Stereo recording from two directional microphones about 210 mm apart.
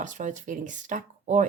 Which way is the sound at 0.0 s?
35° right (ahead or behind).